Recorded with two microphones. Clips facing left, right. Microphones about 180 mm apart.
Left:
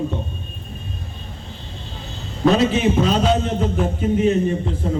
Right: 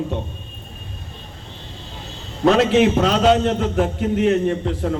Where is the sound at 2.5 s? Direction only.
75° right (ahead or behind).